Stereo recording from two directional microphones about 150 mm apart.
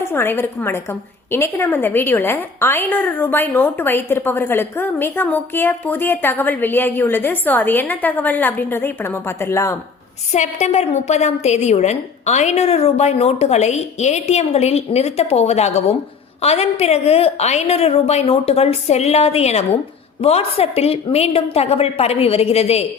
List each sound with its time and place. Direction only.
0.0 s a woman's voice: 15° left (ahead or behind)
10.3 s a woman's voice: 50° left (ahead or behind)